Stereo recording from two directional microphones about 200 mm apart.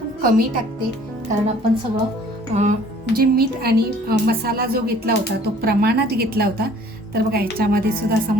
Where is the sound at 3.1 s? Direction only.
50° right (ahead or behind).